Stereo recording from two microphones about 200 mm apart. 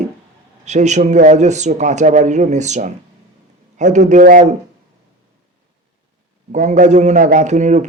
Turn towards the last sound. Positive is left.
turn(degrees=-35)  # may be behind; listen again after turning